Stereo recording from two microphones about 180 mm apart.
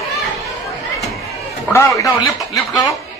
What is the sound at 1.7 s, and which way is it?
Speech, 15° left (ahead or behind).